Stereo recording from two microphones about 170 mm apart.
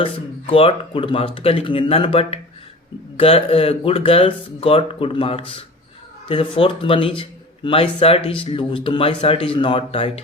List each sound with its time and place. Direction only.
0.0 s a man's voice: 35° left (ahead or behind)